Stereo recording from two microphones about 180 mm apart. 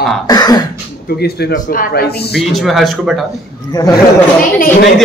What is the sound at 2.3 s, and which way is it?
Speech, centre (ahead or behind).